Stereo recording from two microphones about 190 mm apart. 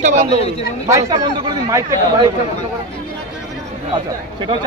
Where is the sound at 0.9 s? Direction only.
20° right (ahead or behind).